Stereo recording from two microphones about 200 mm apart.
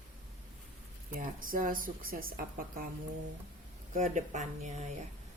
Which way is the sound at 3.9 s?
40° right (ahead or behind).